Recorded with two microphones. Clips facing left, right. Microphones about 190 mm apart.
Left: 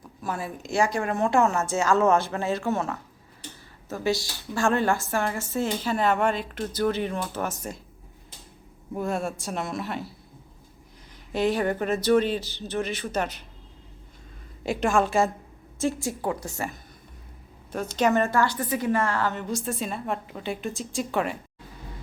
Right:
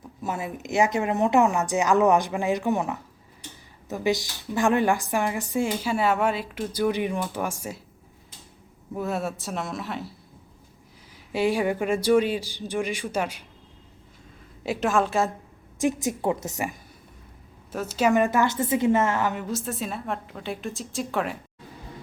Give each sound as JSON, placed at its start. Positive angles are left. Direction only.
{"t": 0.2, "sound": "a woman's voice", "side_deg": -20}
{"t": 9.0, "sound": "a woman's voice", "side_deg": -5}
{"t": 11.3, "sound": "a woman's voice", "side_deg": -10}
{"t": 14.6, "sound": "a woman's voice", "side_deg": -5}
{"t": 15.8, "sound": "a woman's voice", "side_deg": -20}
{"t": 17.7, "sound": "a woman's voice", "side_deg": -5}
{"t": 19.5, "sound": "a woman's voice", "side_deg": 0}